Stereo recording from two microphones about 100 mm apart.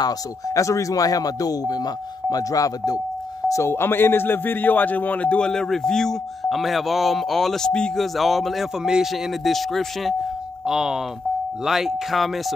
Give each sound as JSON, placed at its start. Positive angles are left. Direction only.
{"t": 0.0, "sound": "a man's voice", "side_deg": 35}